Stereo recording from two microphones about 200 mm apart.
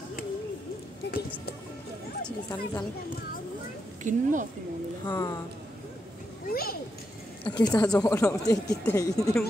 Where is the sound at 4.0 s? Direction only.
40° right (ahead or behind).